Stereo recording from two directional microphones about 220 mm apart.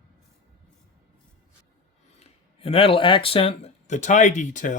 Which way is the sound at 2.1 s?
30° left (ahead or behind).